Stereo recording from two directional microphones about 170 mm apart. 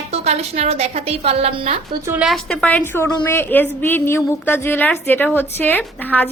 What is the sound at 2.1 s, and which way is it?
A woman's voice, 5° right (ahead or behind).